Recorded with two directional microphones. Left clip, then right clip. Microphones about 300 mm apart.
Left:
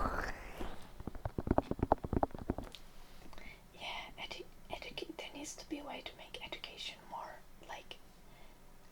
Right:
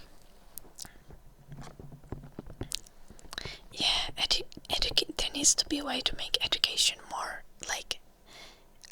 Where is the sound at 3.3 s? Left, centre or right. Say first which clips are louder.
Right 15 dB; right.